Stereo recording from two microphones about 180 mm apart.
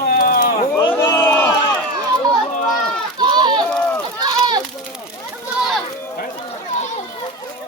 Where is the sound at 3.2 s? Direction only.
25° right (ahead or behind).